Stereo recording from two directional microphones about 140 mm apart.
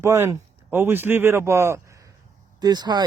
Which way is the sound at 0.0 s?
20° right (ahead or behind).